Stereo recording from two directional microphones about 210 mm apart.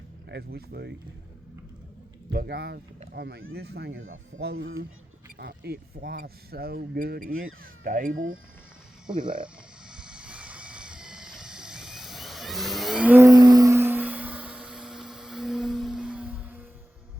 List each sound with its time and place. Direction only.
0.3 s speech: 50° right (ahead or behind)
2.3 s speech: 50° right (ahead or behind)
9.2 s a sound: 25° right (ahead or behind)
9.9 s vehicle: 5° right (ahead or behind)